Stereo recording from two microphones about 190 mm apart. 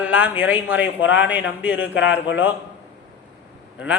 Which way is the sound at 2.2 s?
75° left (ahead or behind).